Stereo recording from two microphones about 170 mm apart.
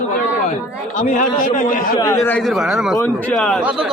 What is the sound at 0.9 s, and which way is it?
Speech, 45° left (ahead or behind).